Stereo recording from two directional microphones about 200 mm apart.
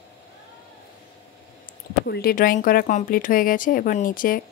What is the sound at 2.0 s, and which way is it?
Speech, 50° left (ahead or behind).